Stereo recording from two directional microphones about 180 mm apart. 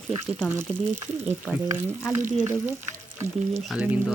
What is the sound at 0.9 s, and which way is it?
Stir, 10° right (ahead or behind).